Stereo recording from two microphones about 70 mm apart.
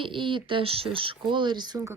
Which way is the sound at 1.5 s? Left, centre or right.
Right.